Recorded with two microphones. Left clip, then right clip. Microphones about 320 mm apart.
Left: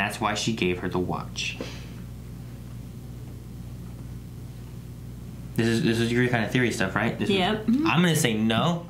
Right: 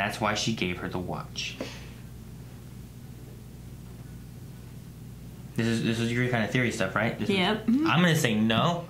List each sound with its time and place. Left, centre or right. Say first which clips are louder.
0.0 s speech: left 1 dB; right
5.6 s speech: left 4 dB; right
7.2 s speech: left 2 dB; centre
7.8 s speech: left 1 dB; right